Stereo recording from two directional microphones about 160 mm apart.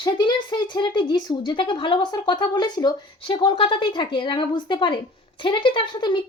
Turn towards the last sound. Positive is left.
turn(degrees=30)  # may be behind; listen again after turning